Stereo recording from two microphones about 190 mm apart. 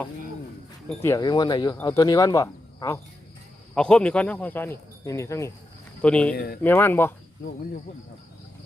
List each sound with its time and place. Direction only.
0.9 s speech: 15° left (ahead or behind)
3.8 s speech: 5° left (ahead or behind)
6.3 s speech: 55° left (ahead or behind)
6.6 s speech: 10° left (ahead or behind)